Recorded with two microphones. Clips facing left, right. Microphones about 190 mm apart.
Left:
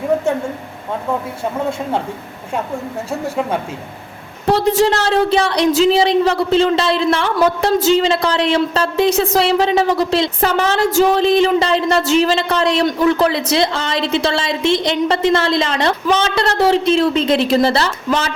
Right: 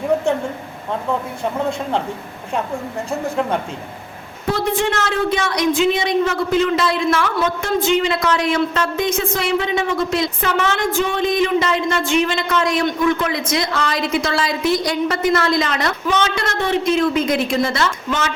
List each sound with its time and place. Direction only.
3.1 s speech: 5° left (ahead or behind)
4.4 s a woman's voice: 35° left (ahead or behind)